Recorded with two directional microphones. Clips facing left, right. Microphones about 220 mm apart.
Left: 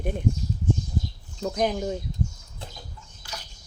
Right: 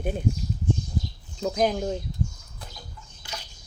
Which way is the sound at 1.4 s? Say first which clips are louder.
Right 1 dB; centre (ahead or behind).